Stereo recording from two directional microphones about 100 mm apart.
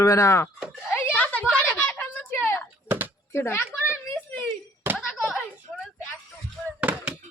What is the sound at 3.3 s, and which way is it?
Speech, 25° left (ahead or behind).